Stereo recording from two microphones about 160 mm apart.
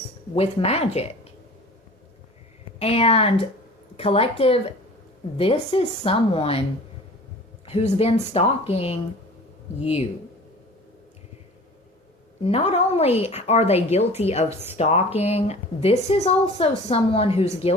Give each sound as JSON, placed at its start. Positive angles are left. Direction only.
{"t": 0.3, "sound": "speech", "side_deg": 40}
{"t": 2.7, "sound": "speech", "side_deg": 40}
{"t": 7.6, "sound": "speech", "side_deg": 40}
{"t": 12.4, "sound": "speech", "side_deg": 40}